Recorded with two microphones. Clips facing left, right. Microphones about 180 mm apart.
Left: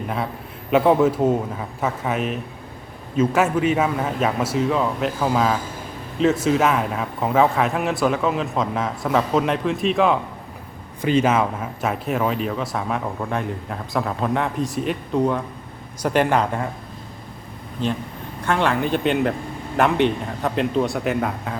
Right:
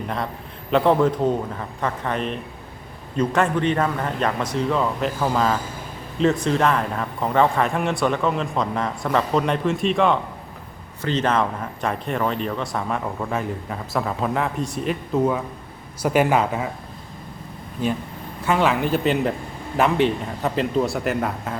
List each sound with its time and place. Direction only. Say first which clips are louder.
0.7 s speech: left 2 dB; 5° left (ahead or behind)
18.4 s speech: right 1 dB; 5° right (ahead or behind)